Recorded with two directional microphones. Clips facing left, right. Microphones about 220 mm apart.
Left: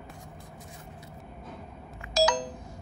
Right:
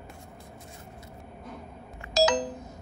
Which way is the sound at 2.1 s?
20° right (ahead or behind).